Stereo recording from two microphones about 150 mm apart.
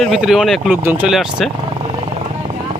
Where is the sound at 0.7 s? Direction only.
10° right (ahead or behind).